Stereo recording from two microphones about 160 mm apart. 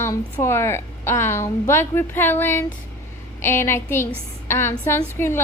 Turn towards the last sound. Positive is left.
turn(degrees=15)  # may be behind; listen again after turning